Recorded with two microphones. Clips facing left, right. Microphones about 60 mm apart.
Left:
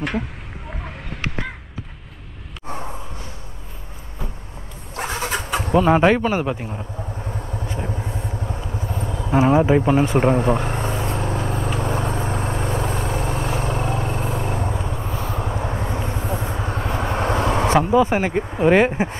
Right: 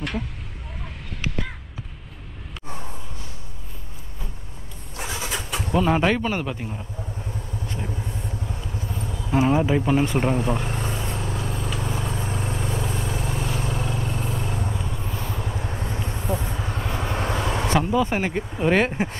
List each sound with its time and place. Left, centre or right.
4.9 s bird: left
5.8 s speech: centre
7.2 s vehicle: left
7.6 s vehicle: left
8.4 s vehicle: left
9.3 s speech: centre
10.3 s vehicle: left
15.0 s vehicle: centre
15.3 s vehicle: left
16.1 s vehicle: centre
16.4 s vehicle: left
17.7 s speech: centre